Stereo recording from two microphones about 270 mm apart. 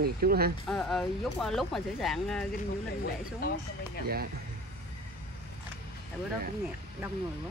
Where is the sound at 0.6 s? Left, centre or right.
Centre.